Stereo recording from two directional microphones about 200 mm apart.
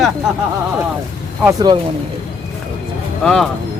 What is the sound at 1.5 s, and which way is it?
Speech, 20° right (ahead or behind).